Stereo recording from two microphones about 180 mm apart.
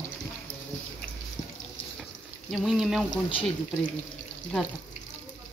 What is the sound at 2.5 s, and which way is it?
Speech, centre (ahead or behind).